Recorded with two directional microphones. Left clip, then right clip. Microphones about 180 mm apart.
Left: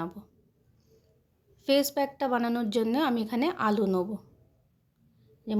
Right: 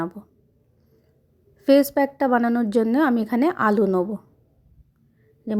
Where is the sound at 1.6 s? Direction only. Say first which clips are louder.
Right 8 dB; 40° right (ahead or behind).